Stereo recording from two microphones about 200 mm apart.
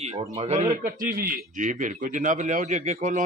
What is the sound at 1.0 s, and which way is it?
A man's voice, 45° right (ahead or behind).